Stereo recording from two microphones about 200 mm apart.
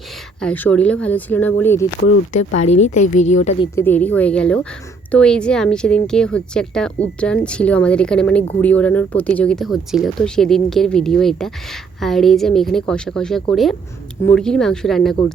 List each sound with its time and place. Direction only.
0.3 s speech: 5° left (ahead or behind)
2.6 s a woman's voice: 35° left (ahead or behind)
3.8 s speech: 10° left (ahead or behind)